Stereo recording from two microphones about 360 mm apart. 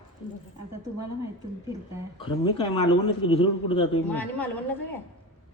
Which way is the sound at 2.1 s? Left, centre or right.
Centre.